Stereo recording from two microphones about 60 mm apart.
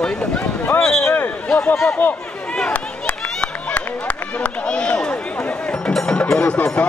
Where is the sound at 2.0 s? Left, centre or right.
Left.